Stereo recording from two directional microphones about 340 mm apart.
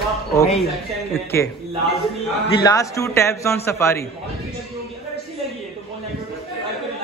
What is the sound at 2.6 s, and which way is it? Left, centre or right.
A man's voice, centre.